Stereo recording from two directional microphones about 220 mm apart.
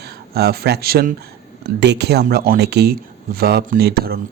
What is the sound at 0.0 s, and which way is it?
Speech, 45° right (ahead or behind).